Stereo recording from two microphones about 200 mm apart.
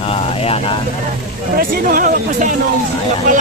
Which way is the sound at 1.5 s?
45° right (ahead or behind).